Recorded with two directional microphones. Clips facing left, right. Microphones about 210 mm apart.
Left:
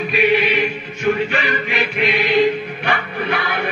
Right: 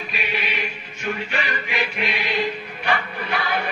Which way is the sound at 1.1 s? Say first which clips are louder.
Left 10 dB; 70° left (ahead or behind).